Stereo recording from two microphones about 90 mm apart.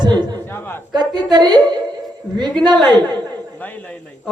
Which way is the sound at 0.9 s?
50° right (ahead or behind).